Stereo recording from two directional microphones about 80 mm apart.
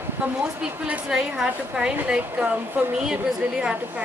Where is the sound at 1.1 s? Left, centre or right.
Centre.